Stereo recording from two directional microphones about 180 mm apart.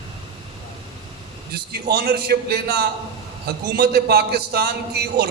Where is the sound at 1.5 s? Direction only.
60° right (ahead or behind).